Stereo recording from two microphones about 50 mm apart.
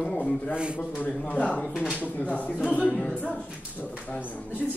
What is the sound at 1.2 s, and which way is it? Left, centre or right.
A man's voice, left.